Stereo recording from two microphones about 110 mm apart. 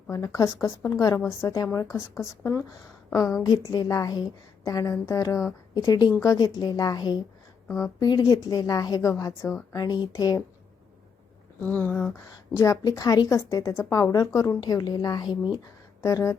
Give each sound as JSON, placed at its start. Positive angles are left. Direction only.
{"t": 0.1, "sound": "a woman's voice", "side_deg": 30}
{"t": 11.6, "sound": "speech", "side_deg": 15}
{"t": 12.5, "sound": "a woman's voice", "side_deg": 30}
{"t": 14.6, "sound": "a woman's voice", "side_deg": 35}